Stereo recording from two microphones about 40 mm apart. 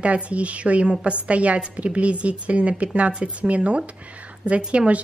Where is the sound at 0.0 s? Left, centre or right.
Right.